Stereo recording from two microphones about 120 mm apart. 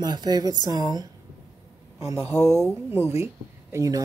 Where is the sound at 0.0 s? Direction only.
35° right (ahead or behind).